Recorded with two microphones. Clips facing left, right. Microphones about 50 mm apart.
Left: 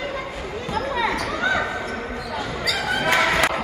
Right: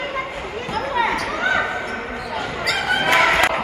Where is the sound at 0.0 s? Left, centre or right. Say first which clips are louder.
Right 3 dB; right.